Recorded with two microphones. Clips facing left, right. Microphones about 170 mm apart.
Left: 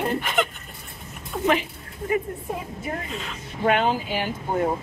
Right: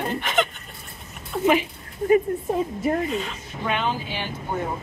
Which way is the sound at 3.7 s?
45° left (ahead or behind).